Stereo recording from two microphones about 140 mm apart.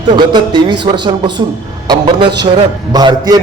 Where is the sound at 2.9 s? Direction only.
30° right (ahead or behind).